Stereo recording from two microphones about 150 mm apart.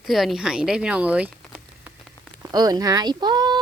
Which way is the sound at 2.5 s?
25° right (ahead or behind).